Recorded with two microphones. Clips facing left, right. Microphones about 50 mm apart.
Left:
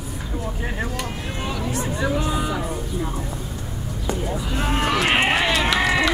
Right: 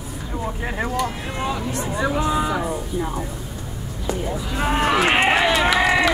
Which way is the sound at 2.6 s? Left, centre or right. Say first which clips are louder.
Right 2 dB; centre.